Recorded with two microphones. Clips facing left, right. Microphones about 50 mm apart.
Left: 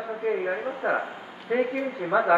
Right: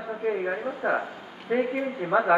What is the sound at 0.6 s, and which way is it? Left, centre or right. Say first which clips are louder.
Speech: even; left.